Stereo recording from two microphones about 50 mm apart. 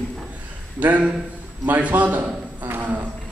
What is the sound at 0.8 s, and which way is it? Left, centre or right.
A man's voice, right.